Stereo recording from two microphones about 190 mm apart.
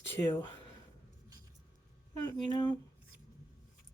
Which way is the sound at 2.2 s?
20° left (ahead or behind).